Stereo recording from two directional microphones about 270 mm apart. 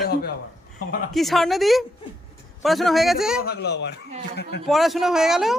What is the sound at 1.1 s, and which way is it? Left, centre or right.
A child's voice, centre.